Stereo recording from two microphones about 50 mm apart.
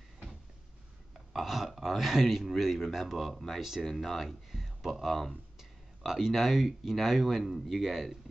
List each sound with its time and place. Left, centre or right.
1.1 s speech: centre
5.6 s speech: centre